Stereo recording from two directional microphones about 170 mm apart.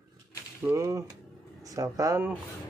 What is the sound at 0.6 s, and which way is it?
Speech, 20° right (ahead or behind).